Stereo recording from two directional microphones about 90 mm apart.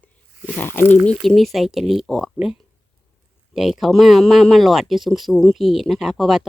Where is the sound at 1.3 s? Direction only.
Centre (ahead or behind).